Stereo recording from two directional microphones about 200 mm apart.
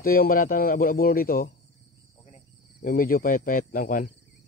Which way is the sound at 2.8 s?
45° left (ahead or behind).